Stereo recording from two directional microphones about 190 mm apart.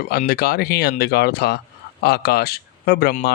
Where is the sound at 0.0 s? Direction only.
55° left (ahead or behind).